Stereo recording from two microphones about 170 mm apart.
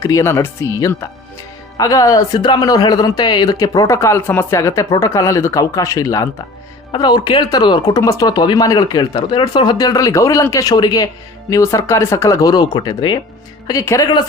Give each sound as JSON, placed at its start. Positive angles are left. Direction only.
{"t": 0.0, "sound": "speech", "side_deg": 20}